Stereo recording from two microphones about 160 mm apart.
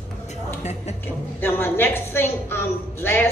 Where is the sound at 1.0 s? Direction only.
15° left (ahead or behind).